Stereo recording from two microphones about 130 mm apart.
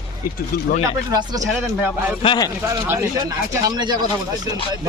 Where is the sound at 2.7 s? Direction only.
25° right (ahead or behind).